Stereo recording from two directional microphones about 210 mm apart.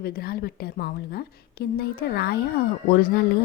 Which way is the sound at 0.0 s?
45° left (ahead or behind).